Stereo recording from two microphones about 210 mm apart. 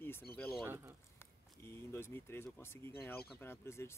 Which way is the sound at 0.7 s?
10° right (ahead or behind).